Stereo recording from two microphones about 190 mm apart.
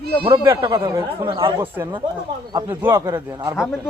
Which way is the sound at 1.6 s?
10° right (ahead or behind).